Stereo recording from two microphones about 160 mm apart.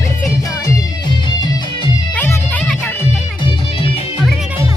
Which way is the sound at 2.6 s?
5° left (ahead or behind).